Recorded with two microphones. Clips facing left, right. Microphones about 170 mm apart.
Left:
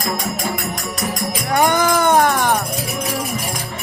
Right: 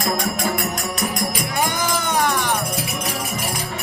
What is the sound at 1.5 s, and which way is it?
Music, 60° left (ahead or behind).